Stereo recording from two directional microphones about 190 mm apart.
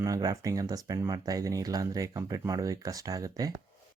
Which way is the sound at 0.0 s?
20° right (ahead or behind).